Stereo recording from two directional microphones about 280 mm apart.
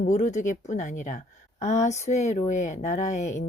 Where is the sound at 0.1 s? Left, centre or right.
Left.